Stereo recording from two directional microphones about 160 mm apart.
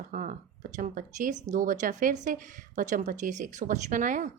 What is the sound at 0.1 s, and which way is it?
A woman's voice, 50° right (ahead or behind).